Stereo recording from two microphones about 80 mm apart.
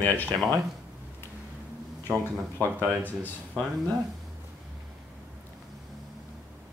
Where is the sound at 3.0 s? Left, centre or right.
Left.